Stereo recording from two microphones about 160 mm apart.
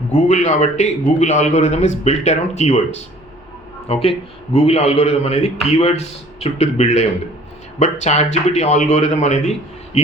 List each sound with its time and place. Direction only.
0.1 s a man's voice: 50° left (ahead or behind)